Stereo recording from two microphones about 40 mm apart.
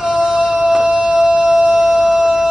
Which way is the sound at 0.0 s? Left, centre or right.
Centre.